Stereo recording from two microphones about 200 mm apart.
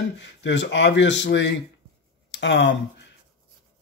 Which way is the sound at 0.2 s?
65° left (ahead or behind).